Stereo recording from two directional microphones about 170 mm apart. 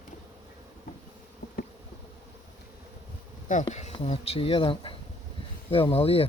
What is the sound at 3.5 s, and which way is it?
Speech, 45° left (ahead or behind).